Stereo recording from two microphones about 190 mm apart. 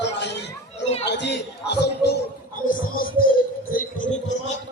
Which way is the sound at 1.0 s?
65° left (ahead or behind).